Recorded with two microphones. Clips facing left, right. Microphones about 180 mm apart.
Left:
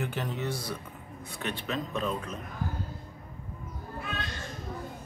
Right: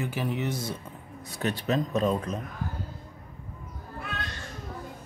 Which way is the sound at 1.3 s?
40° right (ahead or behind).